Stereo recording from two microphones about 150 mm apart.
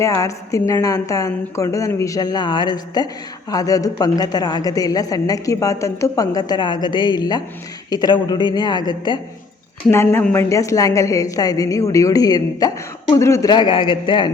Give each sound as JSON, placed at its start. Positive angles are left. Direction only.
{"t": 0.0, "sound": "a woman's voice", "side_deg": 20}
{"t": 9.9, "sound": "a woman's voice", "side_deg": 15}